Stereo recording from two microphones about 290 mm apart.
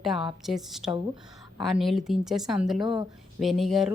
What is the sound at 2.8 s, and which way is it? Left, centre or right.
Speech, centre.